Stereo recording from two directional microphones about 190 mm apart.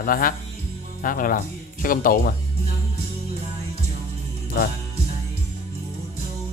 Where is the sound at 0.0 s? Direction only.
50° left (ahead or behind).